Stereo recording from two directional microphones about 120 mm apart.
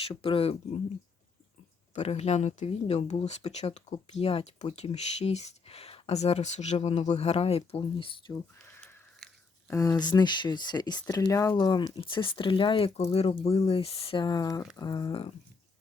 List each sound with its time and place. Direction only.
0.1 s speech: 50° left (ahead or behind)
2.0 s speech: 65° left (ahead or behind); by 8.1 s 45° left (ahead or behind)
9.6 s speech: 30° left (ahead or behind)
11.5 s speech: 40° left (ahead or behind)